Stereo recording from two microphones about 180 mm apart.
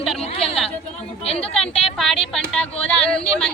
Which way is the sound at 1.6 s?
5° left (ahead or behind).